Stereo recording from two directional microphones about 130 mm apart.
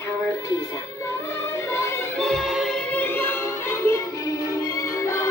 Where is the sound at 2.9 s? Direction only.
15° left (ahead or behind).